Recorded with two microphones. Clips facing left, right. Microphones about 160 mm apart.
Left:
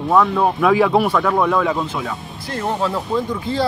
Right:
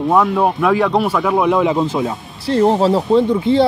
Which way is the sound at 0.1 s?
5° right (ahead or behind).